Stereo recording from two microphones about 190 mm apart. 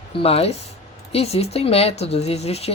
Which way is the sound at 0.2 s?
30° left (ahead or behind).